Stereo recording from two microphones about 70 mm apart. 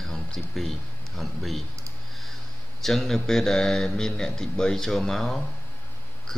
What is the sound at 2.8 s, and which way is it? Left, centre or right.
Speech, centre.